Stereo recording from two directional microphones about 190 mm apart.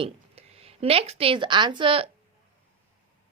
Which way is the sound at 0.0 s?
30° right (ahead or behind).